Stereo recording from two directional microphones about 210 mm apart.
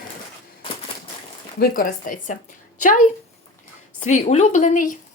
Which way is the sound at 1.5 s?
45° left (ahead or behind).